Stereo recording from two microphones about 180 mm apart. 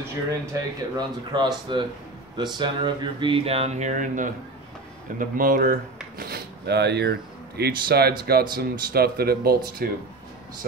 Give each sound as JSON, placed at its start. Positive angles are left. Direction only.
{"t": 0.3, "sound": "speech", "side_deg": -20}